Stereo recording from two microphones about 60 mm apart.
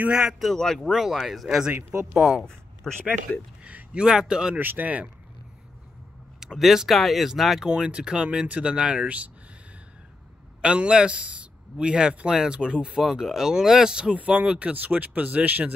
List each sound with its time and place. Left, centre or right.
0.1 s speech: centre
0.6 s speech: centre
0.8 s speech: centre
1.7 s speech: right
2.1 s speech: centre
2.8 s speech: centre
3.3 s speech: left
3.6 s speech: centre
4.6 s speech: right
6.4 s speech: centre
7.7 s speech: centre
10.6 s speech: centre